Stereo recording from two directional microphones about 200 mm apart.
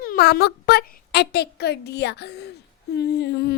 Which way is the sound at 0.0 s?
50° left (ahead or behind).